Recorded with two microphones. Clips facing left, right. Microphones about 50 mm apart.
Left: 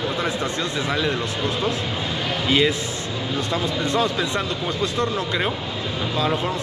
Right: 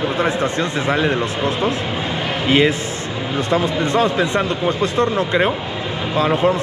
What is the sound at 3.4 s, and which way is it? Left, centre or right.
A man's voice, right.